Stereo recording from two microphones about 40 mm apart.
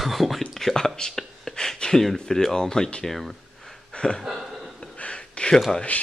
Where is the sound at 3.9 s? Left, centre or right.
Centre.